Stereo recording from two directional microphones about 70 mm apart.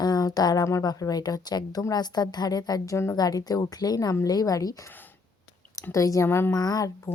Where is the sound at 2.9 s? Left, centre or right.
Left.